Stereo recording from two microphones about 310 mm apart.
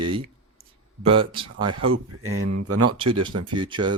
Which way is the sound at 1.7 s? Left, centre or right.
Right.